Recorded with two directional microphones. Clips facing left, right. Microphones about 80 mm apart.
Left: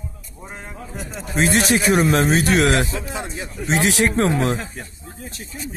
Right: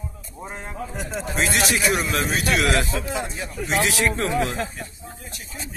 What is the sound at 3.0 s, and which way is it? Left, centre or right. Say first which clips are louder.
A man's voice: right 1 dB; centre.